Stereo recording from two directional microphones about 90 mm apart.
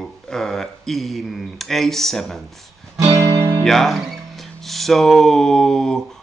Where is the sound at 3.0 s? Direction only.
35° right (ahead or behind).